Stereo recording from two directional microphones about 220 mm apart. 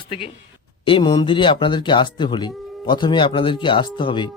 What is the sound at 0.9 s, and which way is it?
Speech, 20° left (ahead or behind).